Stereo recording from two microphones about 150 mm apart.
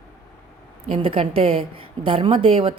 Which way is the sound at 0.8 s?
35° right (ahead or behind).